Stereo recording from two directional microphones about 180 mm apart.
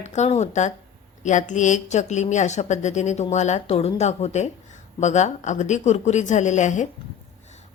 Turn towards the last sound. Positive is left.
turn(degrees=40)  # may be behind; listen again after turning